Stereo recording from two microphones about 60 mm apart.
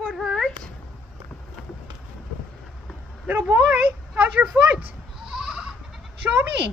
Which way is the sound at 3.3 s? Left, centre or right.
Right.